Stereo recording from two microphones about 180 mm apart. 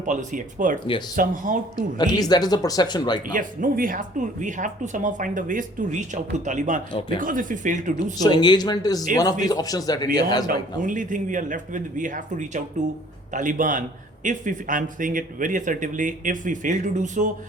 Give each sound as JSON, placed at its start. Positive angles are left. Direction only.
{"t": 0.0, "sound": "speech", "side_deg": -45}
{"t": 1.7, "sound": "speech", "side_deg": 20}
{"t": 3.3, "sound": "speech", "side_deg": -50}
{"t": 8.2, "sound": "speech", "side_deg": 25}
{"t": 10.4, "sound": "speech", "side_deg": -45}